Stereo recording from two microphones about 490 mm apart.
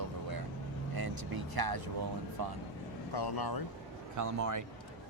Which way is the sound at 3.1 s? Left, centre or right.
Left.